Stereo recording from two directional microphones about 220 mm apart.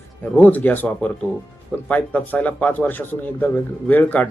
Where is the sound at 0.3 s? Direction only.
10° left (ahead or behind).